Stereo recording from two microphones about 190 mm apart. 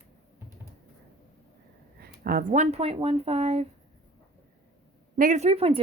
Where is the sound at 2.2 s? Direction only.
50° right (ahead or behind).